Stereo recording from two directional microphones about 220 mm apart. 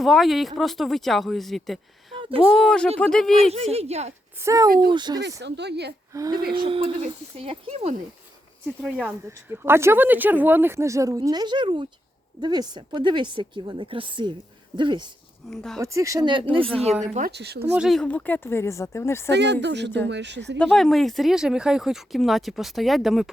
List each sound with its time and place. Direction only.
0.0 s speech: centre (ahead or behind)
3.5 s a woman's voice: 30° right (ahead or behind)
4.4 s a woman's voice: 15° right (ahead or behind)
5.4 s speech: 50° right (ahead or behind)
6.1 s a woman's voice: 15° right (ahead or behind)
8.8 s a woman's voice: 5° right (ahead or behind)
15.4 s speech: centre (ahead or behind)
15.8 s a woman's voice: 15° right (ahead or behind)
17.2 s speech: 45° right (ahead or behind)
17.6 s speech: 5° right (ahead or behind)
19.3 s speech: 50° right (ahead or behind)
20.6 s speech: 5° left (ahead or behind)